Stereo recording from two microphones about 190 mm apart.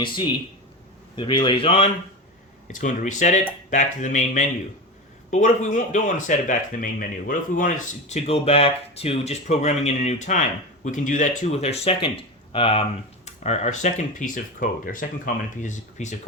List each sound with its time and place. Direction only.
1.1 s speech: 25° left (ahead or behind)
2.7 s speech: 40° left (ahead or behind)